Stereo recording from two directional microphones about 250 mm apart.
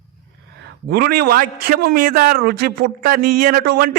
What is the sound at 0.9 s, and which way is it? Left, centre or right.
A man's voice, right.